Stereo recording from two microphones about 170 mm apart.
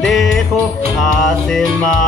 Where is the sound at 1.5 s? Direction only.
5° left (ahead or behind).